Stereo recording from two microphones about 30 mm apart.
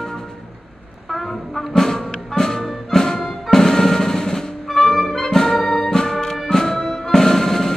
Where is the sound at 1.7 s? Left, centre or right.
Left.